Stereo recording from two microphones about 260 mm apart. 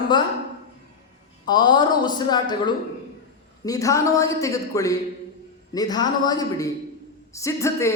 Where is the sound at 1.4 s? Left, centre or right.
Centre.